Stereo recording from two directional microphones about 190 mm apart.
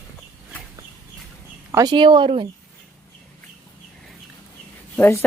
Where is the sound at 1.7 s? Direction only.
20° right (ahead or behind).